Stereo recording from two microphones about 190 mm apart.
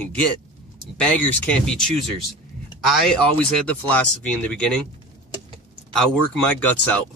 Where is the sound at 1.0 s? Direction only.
5° left (ahead or behind).